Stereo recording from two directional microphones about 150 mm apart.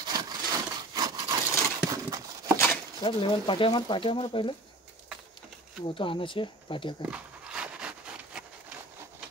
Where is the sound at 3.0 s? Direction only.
35° left (ahead or behind).